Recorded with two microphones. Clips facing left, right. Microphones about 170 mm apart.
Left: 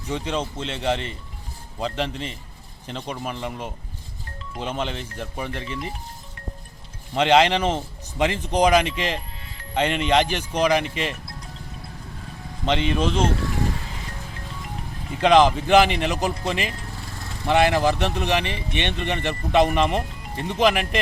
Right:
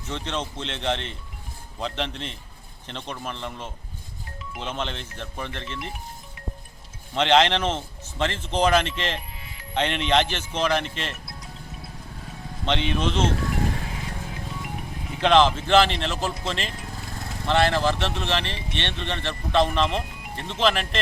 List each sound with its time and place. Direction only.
0.1 s speech: 10° left (ahead or behind)
7.1 s speech: 10° left (ahead or behind)
9.4 s music: 10° right (ahead or behind)
9.7 s speech: 5° left (ahead or behind)
12.6 s speech: 5° left (ahead or behind)
15.2 s speech: 10° left (ahead or behind)